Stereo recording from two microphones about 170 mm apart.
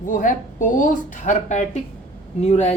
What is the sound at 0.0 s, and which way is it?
Speech, 50° left (ahead or behind).